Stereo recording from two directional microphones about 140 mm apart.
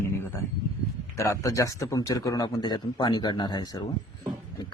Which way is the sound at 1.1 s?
20° left (ahead or behind).